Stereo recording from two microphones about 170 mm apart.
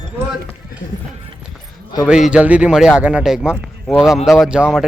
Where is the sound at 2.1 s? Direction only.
5° right (ahead or behind).